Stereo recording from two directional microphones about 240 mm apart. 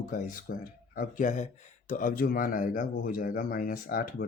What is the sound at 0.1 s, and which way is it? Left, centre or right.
Speech, left.